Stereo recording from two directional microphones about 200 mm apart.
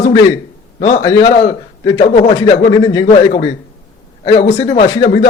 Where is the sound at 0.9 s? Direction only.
15° left (ahead or behind).